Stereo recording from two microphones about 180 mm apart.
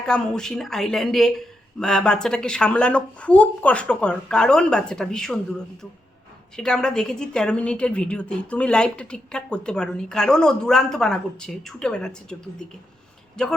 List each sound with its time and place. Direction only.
0.0 s a woman's voice: 5° left (ahead or behind)